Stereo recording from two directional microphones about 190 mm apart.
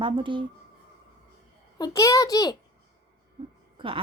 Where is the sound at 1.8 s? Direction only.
15° left (ahead or behind).